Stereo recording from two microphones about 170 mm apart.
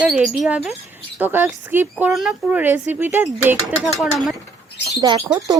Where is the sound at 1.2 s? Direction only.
10° right (ahead or behind).